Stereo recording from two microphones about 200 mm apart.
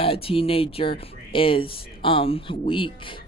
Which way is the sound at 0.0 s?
30° left (ahead or behind).